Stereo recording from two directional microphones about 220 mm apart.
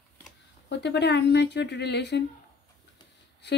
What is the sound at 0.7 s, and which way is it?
Speech, 50° left (ahead or behind).